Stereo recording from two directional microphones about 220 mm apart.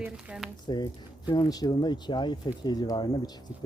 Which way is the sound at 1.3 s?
20° left (ahead or behind).